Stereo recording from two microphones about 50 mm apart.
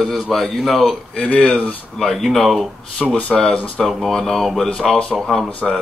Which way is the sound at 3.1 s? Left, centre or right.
Left.